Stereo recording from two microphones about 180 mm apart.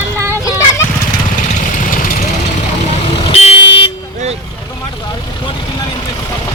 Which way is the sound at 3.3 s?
35° left (ahead or behind).